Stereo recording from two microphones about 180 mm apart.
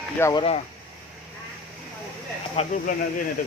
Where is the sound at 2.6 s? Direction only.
35° left (ahead or behind).